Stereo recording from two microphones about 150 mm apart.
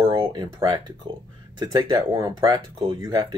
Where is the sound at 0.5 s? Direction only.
25° right (ahead or behind).